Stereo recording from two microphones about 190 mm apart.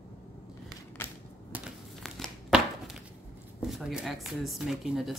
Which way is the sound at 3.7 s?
Centre (ahead or behind).